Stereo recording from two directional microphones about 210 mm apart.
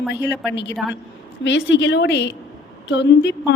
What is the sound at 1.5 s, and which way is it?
A woman's voice, 60° left (ahead or behind).